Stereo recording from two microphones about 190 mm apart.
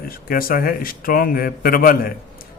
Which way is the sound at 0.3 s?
50° left (ahead or behind).